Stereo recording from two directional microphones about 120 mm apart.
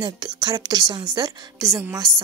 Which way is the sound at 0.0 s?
35° right (ahead or behind).